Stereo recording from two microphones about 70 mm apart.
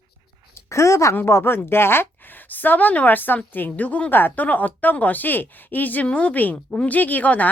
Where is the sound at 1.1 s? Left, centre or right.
Left.